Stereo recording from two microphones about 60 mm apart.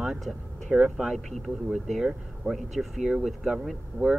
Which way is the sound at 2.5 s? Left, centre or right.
Centre.